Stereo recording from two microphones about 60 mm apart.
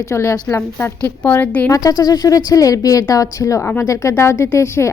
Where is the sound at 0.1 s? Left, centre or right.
Left.